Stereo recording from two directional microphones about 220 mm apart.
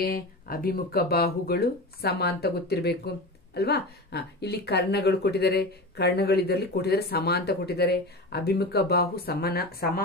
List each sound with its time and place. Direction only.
0.0 s a woman's voice: 40° left (ahead or behind)